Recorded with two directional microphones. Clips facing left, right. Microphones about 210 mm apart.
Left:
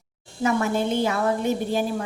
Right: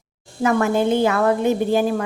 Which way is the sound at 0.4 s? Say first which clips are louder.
Right 5 dB; 60° right (ahead or behind).